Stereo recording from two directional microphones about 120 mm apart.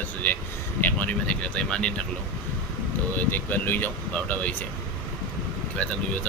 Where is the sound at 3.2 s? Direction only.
15° left (ahead or behind).